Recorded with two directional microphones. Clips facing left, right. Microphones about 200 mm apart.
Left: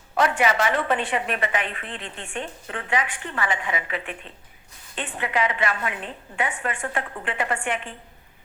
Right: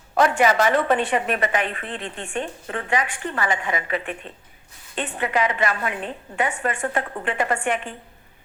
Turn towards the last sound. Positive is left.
turn(degrees=-45)  # may be behind; listen again after turning